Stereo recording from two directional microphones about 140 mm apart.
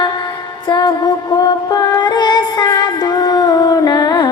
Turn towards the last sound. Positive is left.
turn(degrees=25)  # may be behind; listen again after turning